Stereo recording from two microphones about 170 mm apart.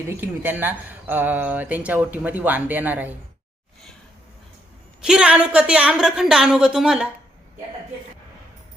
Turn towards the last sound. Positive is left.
turn(degrees=0)  # may be behind; listen again after turning